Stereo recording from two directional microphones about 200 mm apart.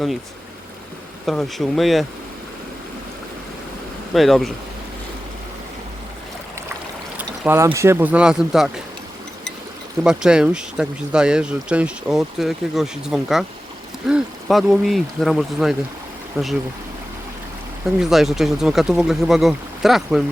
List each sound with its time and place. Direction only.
1.3 s speech: centre (ahead or behind)
4.1 s speech: centre (ahead or behind)
7.2 s speech: 10° right (ahead or behind)
10.0 s speech: 5° right (ahead or behind)
16.4 s speech: 10° right (ahead or behind)
18.0 s speech: centre (ahead or behind)